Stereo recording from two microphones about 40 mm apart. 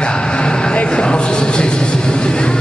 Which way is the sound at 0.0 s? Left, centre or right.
Left.